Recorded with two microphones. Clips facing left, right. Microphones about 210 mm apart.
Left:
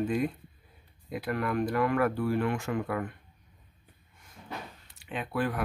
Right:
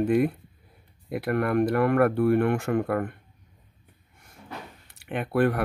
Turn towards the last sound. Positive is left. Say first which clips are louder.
# right 7 dB
turn(degrees=-60)  # may be behind; listen again after turning